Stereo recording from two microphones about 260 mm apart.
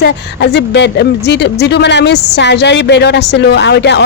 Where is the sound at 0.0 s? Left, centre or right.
Left.